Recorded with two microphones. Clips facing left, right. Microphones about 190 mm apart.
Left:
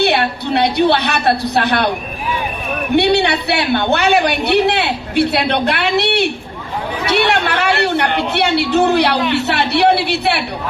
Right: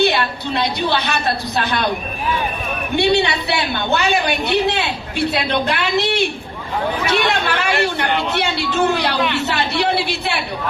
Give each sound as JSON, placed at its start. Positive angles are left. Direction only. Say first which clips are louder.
{"t": 0.0, "sound": "a woman's voice", "louder": "left 2 dB", "side_deg": 65}
{"t": 2.9, "sound": "a woman's voice", "louder": "left 3 dB", "side_deg": 65}